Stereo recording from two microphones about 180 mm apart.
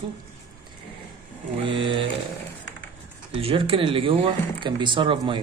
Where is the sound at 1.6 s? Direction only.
30° right (ahead or behind).